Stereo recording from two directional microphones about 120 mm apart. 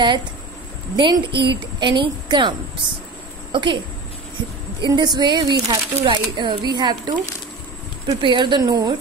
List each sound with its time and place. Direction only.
0.9 s speech: 40° right (ahead or behind)
3.5 s a woman's voice: 45° right (ahead or behind)
4.8 s speech: 35° right (ahead or behind)
8.2 s speech: 40° right (ahead or behind)